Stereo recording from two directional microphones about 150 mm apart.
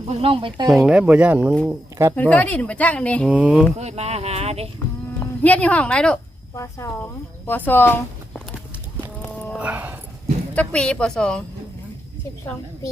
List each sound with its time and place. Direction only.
0.2 s speech: 35° right (ahead or behind)
0.7 s speech: 5° right (ahead or behind)
2.1 s speech: 10° left (ahead or behind)
3.2 s speech: 10° right (ahead or behind)
3.8 s speech: 45° right (ahead or behind)
5.2 s speech: 10° left (ahead or behind)
6.6 s speech: 20° left (ahead or behind)
9.3 s a sound: 5° right (ahead or behind)
10.5 s speech: 10° left (ahead or behind)